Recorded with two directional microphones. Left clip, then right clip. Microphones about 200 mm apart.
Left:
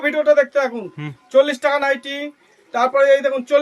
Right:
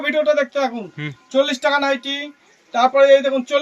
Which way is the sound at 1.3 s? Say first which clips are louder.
Left 2 dB; 45° left (ahead or behind).